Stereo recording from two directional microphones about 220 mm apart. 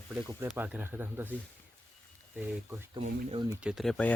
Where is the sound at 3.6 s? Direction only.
Centre (ahead or behind).